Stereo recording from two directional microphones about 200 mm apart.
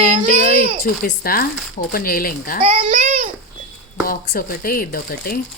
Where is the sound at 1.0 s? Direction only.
45° left (ahead or behind).